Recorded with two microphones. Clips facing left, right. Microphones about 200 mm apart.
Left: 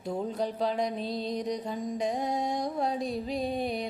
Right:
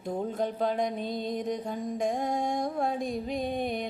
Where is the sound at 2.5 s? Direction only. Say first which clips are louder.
Right 1 dB; 50° right (ahead or behind).